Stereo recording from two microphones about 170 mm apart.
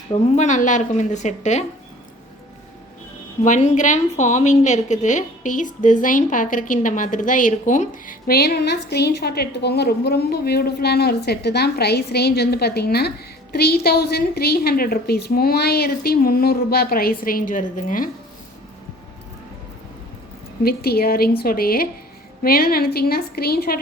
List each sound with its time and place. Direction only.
0.1 s speech: 40° left (ahead or behind)
3.4 s a woman's voice: 45° left (ahead or behind)
20.7 s a woman's voice: 65° left (ahead or behind)